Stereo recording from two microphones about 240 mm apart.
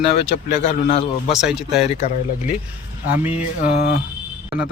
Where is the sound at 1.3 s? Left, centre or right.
Centre.